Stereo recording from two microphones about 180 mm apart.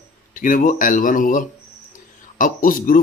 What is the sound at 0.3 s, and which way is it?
Speech, 50° left (ahead or behind).